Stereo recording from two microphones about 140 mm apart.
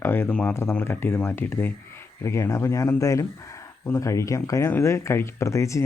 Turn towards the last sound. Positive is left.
turn(degrees=20)  # may be behind; listen again after turning